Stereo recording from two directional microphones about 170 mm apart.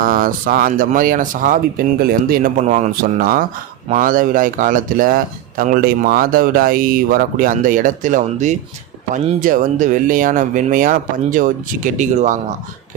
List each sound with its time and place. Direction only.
0.0 s speech: 55° right (ahead or behind)